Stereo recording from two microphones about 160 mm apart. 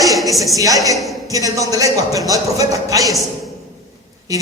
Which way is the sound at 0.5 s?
20° right (ahead or behind).